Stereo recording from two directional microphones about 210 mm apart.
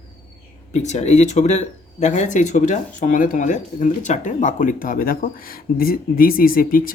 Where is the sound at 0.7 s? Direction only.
35° left (ahead or behind).